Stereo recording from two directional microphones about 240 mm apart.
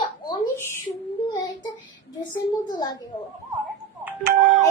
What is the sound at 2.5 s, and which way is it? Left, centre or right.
Speech, centre.